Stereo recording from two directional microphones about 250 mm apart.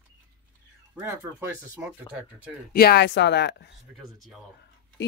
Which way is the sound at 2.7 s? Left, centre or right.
Left.